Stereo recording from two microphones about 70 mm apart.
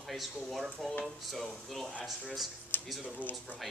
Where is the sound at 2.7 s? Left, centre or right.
Left.